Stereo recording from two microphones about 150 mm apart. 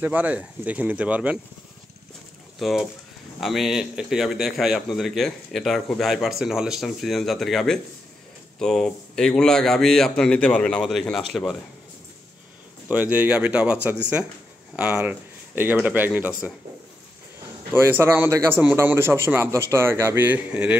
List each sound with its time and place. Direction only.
0.0 s a man's voice: 10° right (ahead or behind)
2.6 s a man's voice: centre (ahead or behind)
12.8 s a man's voice: 10° right (ahead or behind)
17.7 s a man's voice: 15° right (ahead or behind)